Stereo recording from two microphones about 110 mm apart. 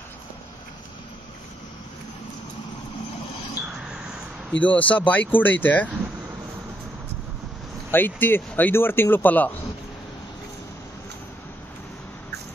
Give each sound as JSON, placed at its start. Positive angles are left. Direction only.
{"t": 4.5, "sound": "speech", "side_deg": 15}
{"t": 7.9, "sound": "speech", "side_deg": 20}